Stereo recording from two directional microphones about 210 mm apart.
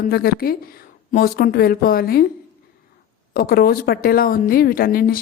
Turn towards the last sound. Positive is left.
turn(degrees=45)  # may be behind; listen again after turning